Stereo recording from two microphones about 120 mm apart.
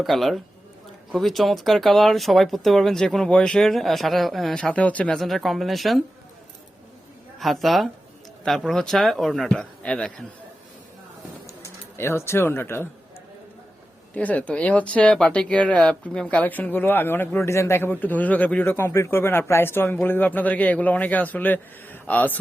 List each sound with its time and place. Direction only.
0.0 s speech: centre (ahead or behind)
7.3 s speech: centre (ahead or behind)
11.9 s speech: 20° left (ahead or behind)
14.1 s speech: 10° left (ahead or behind)